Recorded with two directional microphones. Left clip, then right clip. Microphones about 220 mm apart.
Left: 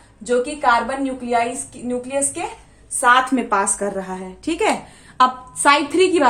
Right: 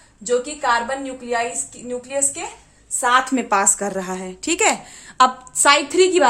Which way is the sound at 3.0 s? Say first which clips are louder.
Left 3 dB; 40° right (ahead or behind).